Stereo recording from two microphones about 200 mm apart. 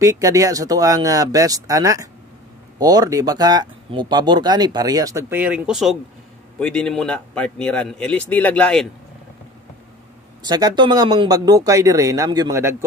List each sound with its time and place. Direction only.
0.0 s a man's voice: 15° right (ahead or behind); by 8.8 s 5° left (ahead or behind)
10.4 s speech: 20° right (ahead or behind)